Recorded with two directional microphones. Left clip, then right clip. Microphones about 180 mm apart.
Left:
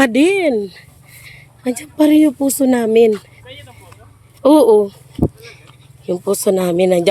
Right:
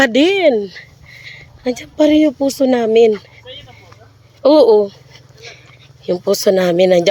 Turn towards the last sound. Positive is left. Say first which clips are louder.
# right 3 dB
turn(degrees=10)  # may be behind; listen again after turning